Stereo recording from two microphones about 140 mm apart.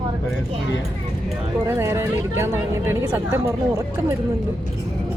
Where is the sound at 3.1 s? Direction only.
20° right (ahead or behind).